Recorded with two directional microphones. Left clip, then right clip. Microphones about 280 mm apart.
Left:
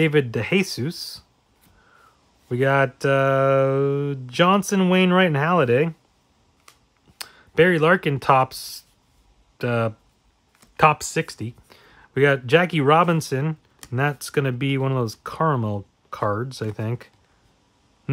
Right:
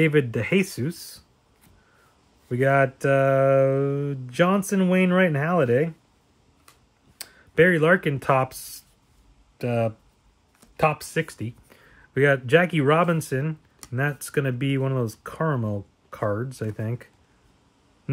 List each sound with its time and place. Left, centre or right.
0.0 s speech: centre
2.5 s speech: centre
7.2 s speech: centre
11.2 s speech: centre